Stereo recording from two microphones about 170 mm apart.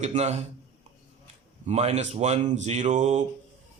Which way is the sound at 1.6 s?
40° right (ahead or behind).